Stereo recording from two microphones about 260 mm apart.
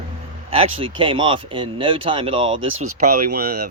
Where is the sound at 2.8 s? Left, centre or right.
Right.